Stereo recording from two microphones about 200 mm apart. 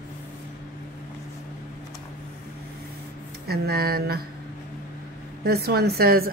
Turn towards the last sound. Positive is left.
turn(degrees=-50)  # may be behind; listen again after turning